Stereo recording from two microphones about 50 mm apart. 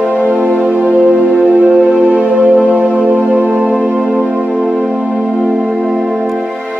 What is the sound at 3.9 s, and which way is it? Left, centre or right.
Music, centre.